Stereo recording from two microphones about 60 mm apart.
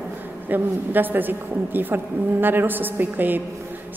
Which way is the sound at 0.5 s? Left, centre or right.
Right.